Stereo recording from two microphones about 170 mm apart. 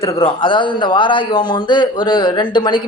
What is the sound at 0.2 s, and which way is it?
Speech, 30° left (ahead or behind).